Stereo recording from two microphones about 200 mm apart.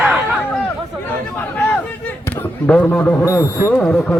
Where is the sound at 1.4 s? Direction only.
10° left (ahead or behind).